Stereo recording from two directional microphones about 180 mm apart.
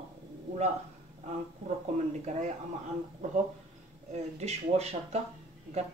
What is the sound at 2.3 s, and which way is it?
Speech, 40° right (ahead or behind).